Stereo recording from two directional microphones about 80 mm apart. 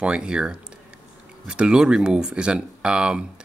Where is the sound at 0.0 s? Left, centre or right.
Centre.